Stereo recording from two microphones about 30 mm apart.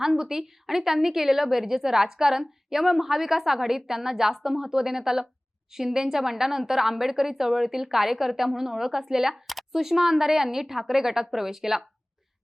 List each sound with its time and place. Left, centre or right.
0.0 s a woman's voice: centre
9.3 s a sound: centre
9.7 s a woman's voice: centre